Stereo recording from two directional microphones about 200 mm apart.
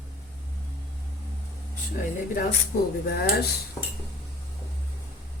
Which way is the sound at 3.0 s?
55° left (ahead or behind).